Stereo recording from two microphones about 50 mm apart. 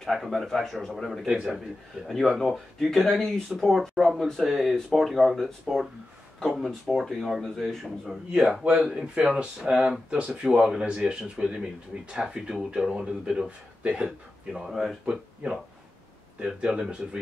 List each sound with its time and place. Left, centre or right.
0.0 s speech: centre
3.4 s speech: centre
8.4 s speech: centre
14.5 s speech: centre
15.4 s speech: right